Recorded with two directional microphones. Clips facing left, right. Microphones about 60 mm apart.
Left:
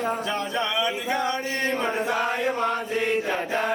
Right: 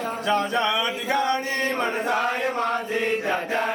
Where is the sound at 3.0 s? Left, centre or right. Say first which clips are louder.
Even; centre.